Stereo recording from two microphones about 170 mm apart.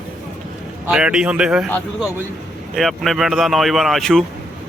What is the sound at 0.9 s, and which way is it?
Speech, 5° right (ahead or behind).